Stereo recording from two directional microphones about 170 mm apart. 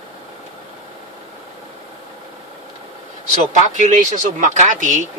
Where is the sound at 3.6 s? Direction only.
45° right (ahead or behind).